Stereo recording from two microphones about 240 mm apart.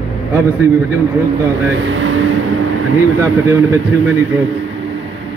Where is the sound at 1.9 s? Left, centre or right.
Right.